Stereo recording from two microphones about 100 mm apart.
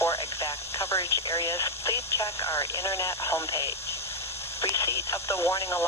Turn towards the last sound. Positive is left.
turn(degrees=35)  # may be behind; listen again after turning